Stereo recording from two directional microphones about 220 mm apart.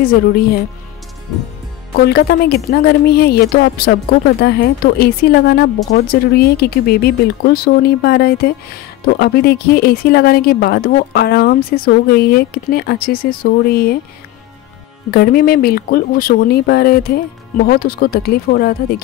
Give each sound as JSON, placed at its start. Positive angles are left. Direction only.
{"t": 0.0, "sound": "a woman's voice", "side_deg": 45}
{"t": 2.0, "sound": "a woman's voice", "side_deg": 45}
{"t": 15.0, "sound": "a woman's voice", "side_deg": 45}